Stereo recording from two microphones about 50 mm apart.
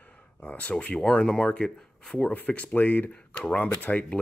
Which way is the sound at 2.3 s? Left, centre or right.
Left.